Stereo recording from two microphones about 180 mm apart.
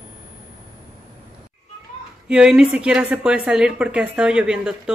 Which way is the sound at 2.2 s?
5° right (ahead or behind).